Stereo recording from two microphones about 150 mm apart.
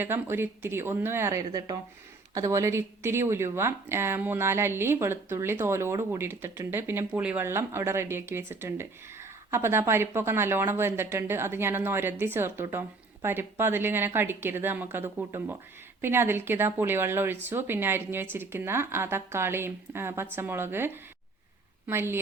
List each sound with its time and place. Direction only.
0.0 s speech: 15° right (ahead or behind)